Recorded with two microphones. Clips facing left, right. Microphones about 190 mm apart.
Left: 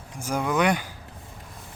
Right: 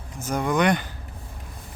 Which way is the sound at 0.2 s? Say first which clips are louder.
Right 1 dB; 10° left (ahead or behind).